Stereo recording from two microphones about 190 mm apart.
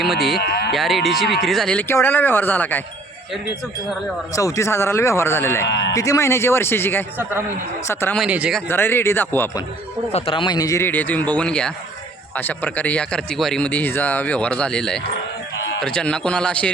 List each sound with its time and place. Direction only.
0.0 s speech: centre (ahead or behind)
0.3 s speech: 55° left (ahead or behind)
0.7 s speech: centre (ahead or behind)
4.4 s a man's voice: 15° left (ahead or behind)
5.6 s speech: 65° left (ahead or behind)
5.9 s a man's voice: 15° left (ahead or behind)
8.2 s speech: 5° right (ahead or behind)
8.7 s a man's voice: 10° left (ahead or behind)
10.1 s a man's voice: 30° left (ahead or behind); by 16.7 s 5° left (ahead or behind)